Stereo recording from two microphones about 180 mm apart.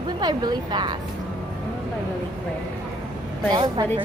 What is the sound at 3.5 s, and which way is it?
Speech, 25° right (ahead or behind).